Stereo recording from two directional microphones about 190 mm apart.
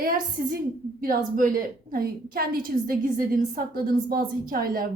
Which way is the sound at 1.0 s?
45° right (ahead or behind).